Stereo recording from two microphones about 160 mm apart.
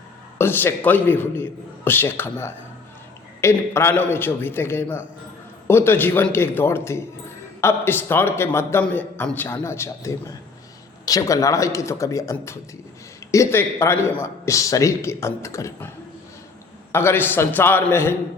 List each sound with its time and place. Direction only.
0.3 s a man's voice: 15° left (ahead or behind)
16.9 s a man's voice: 15° left (ahead or behind)